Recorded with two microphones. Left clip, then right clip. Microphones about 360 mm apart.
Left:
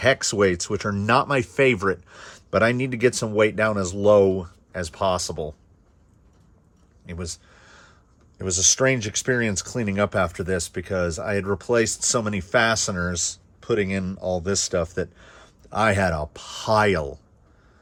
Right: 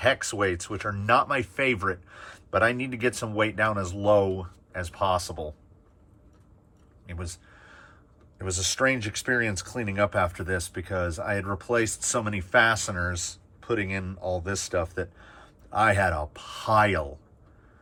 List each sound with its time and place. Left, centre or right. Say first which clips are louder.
0.0 s speech: left 5 dB; centre
7.1 s a sound: left 6 dB; centre
8.4 s speech: left 5 dB; centre